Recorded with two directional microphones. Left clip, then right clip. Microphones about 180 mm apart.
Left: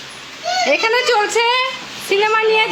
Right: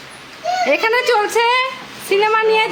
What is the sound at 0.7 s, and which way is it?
A woman's voice, 10° right (ahead or behind).